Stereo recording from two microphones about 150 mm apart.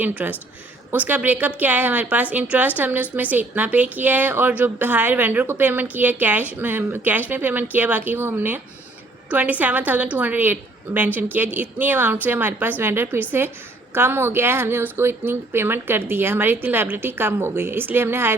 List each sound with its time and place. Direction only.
0.0 s a woman's voice: 10° right (ahead or behind)